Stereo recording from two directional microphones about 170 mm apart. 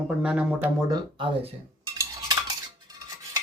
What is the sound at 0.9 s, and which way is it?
Speech, 30° right (ahead or behind).